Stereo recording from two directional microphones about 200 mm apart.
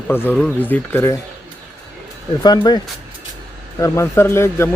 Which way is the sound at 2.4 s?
20° left (ahead or behind).